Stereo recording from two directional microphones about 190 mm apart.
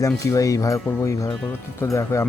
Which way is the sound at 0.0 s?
15° left (ahead or behind).